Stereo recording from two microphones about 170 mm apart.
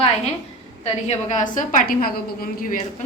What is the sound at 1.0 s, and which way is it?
A woman's voice, 40° left (ahead or behind).